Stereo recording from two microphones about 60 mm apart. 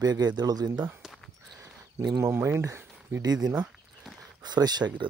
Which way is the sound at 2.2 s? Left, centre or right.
Right.